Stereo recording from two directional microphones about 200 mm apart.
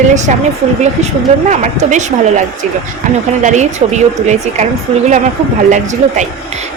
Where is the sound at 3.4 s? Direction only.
35° right (ahead or behind).